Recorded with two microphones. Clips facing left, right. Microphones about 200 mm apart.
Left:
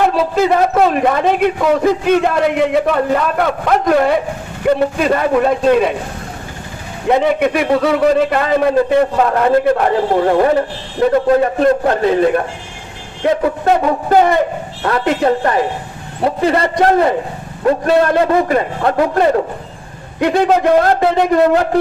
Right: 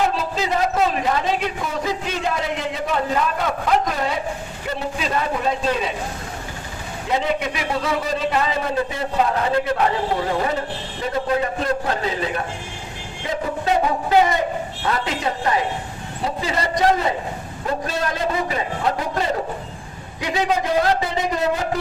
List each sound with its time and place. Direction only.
0.0 s a man's voice: 55° left (ahead or behind)
7.1 s a man's voice: 60° left (ahead or behind)
11.1 s a man's voice: 55° left (ahead or behind)